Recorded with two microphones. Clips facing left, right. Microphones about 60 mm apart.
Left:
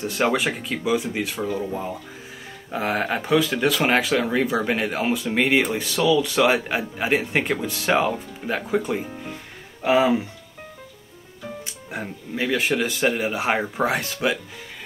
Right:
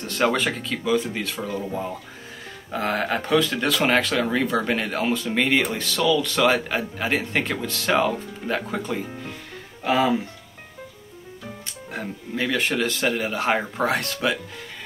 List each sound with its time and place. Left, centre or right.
0.0 s speech: centre
11.9 s speech: centre